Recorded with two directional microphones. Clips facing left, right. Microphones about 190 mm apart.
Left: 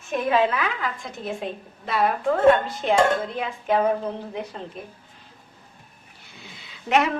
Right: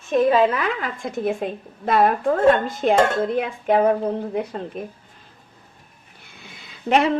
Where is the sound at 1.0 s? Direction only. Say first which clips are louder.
Right 7 dB; 50° right (ahead or behind).